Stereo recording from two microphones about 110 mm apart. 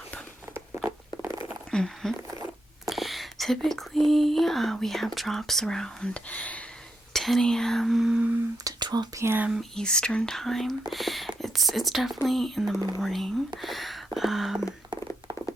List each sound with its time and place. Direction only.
0.5 s a sound: 20° right (ahead or behind)
1.7 s speech: 5° left (ahead or behind)
7.1 s speech: 5° left (ahead or behind)
8.6 s speech: 40° right (ahead or behind)
9.1 s speech: 20° right (ahead or behind)
9.5 s speech: 5° left (ahead or behind)